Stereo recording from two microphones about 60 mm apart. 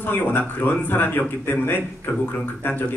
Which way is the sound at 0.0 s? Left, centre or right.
Left.